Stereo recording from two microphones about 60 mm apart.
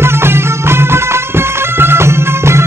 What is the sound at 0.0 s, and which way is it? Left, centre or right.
Music, right.